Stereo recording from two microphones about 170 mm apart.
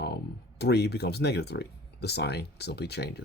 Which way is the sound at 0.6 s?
75° left (ahead or behind).